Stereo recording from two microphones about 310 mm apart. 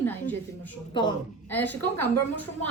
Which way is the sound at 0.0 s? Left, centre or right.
Centre.